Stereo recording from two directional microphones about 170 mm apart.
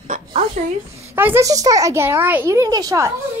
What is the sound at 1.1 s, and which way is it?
Speech, 15° right (ahead or behind).